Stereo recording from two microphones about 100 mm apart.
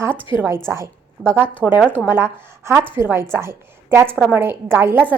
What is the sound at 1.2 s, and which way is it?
Speech, 25° left (ahead or behind).